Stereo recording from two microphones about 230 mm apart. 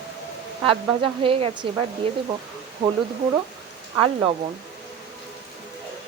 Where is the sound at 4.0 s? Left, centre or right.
Right.